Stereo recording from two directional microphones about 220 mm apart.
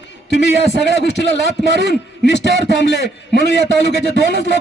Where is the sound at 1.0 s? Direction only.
50° left (ahead or behind).